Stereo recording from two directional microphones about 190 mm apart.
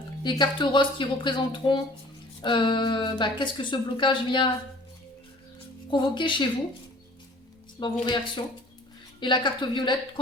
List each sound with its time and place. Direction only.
0.2 s a woman's voice: 25° left (ahead or behind)
5.9 s a woman's voice: 25° left (ahead or behind)
7.8 s a woman's voice: 25° left (ahead or behind)
9.2 s a woman's voice: 25° left (ahead or behind)